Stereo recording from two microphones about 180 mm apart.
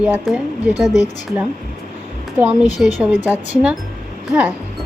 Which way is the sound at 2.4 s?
10° right (ahead or behind).